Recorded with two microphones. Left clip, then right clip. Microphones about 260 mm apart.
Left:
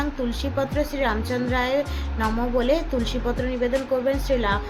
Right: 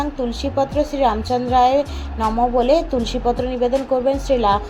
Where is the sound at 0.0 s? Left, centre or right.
Centre.